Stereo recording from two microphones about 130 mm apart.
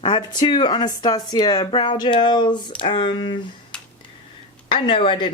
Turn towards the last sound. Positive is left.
turn(degrees=40)  # may be behind; listen again after turning